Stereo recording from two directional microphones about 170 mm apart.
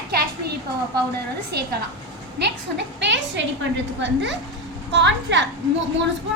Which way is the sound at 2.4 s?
85° right.